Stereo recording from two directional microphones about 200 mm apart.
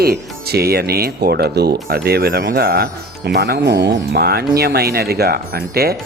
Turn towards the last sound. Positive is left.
turn(degrees=-50)  # may be behind; listen again after turning